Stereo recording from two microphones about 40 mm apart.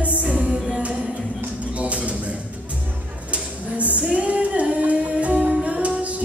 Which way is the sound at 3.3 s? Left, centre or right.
Right.